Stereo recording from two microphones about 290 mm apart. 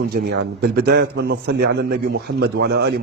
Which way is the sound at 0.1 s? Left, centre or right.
Right.